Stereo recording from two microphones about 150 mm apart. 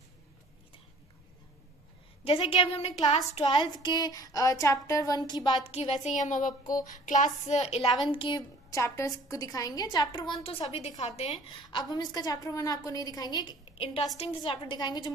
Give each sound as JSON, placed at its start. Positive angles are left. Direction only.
{"t": 2.2, "sound": "child singing", "side_deg": 40}
{"t": 6.0, "sound": "a woman's voice", "side_deg": 55}
{"t": 8.1, "sound": "child singing", "side_deg": 35}
{"t": 10.7, "sound": "a woman's voice", "side_deg": 45}
{"t": 11.7, "sound": "child singing", "side_deg": 25}
{"t": 14.1, "sound": "a woman's voice", "side_deg": 40}